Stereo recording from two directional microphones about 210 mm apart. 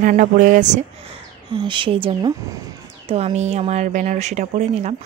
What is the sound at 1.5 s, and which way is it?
Speech, 25° right (ahead or behind).